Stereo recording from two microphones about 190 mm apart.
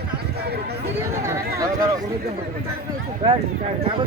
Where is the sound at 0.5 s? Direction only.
60° right (ahead or behind).